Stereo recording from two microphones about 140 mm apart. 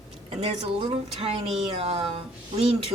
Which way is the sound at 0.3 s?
40° right (ahead or behind).